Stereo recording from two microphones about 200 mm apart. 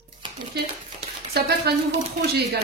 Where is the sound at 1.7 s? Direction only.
55° right (ahead or behind).